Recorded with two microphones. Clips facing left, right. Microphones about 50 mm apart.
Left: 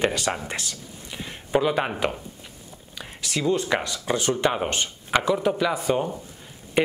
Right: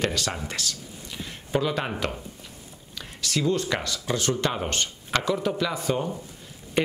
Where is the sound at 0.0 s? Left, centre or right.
Centre.